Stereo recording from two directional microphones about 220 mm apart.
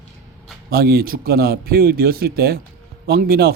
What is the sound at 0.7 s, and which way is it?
Speech, 45° right (ahead or behind).